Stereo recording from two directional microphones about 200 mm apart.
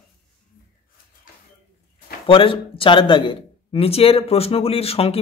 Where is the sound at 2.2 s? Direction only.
25° left (ahead or behind).